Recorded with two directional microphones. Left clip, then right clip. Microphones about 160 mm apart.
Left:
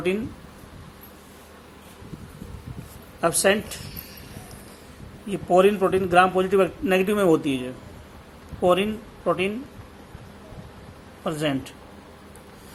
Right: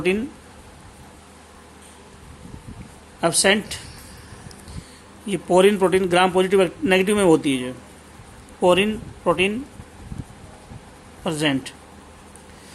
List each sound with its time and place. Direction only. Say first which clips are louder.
3.2 s a man's voice: right 2 dB; 35° right (ahead or behind)
5.3 s a man's voice: right 2 dB; 40° right (ahead or behind)
11.2 s a man's voice: right 3 dB; 35° right (ahead or behind)